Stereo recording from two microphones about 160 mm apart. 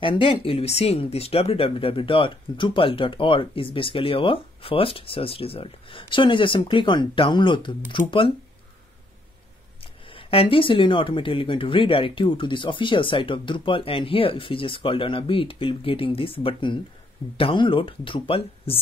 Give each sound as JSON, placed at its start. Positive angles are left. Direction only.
{"t": 0.0, "sound": "speech", "side_deg": 35}
{"t": 10.1, "sound": "speech", "side_deg": 35}